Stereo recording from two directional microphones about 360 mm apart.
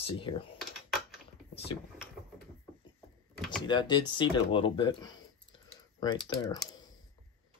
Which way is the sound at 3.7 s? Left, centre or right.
Centre.